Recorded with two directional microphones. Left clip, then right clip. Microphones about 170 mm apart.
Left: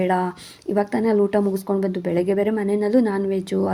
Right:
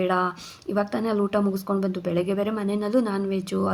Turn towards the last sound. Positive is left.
turn(degrees=25)  # may be behind; listen again after turning